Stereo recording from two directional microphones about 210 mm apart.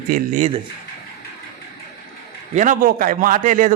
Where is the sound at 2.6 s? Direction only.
40° right (ahead or behind).